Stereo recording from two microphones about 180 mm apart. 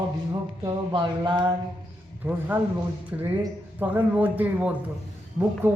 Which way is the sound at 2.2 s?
10° right (ahead or behind).